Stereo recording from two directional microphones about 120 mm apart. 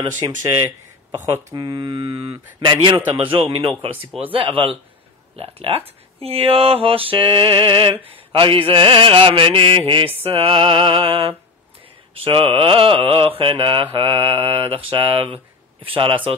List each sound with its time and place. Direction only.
0.2 s mantra: 40° right (ahead or behind)
1.5 s mantra: 35° right (ahead or behind)